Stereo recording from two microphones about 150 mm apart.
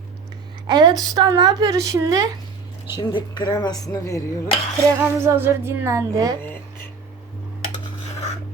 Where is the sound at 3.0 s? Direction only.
30° left (ahead or behind).